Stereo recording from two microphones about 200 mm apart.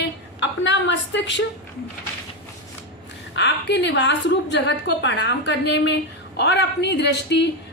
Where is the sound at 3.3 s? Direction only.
60° left (ahead or behind).